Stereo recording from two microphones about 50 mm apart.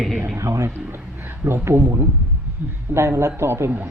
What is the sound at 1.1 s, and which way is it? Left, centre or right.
Speech, right.